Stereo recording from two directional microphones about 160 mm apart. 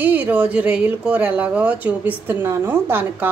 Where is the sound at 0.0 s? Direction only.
10° right (ahead or behind).